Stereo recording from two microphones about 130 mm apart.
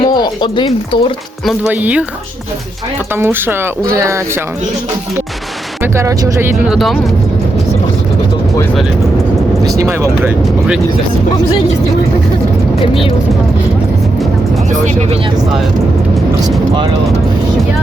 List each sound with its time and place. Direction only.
0.0 s speech: 35° left (ahead or behind)
1.7 s speech: 10° right (ahead or behind)
3.2 s speech: 15° right (ahead or behind)
5.8 s speech: 25° right (ahead or behind)
6.7 s speech: centre (ahead or behind)
12.8 s speech: 45° left (ahead or behind)